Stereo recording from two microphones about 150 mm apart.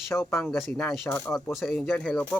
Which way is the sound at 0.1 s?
15° left (ahead or behind).